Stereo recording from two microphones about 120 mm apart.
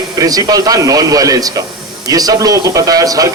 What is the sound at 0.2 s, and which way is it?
A man's voice, 30° right (ahead or behind).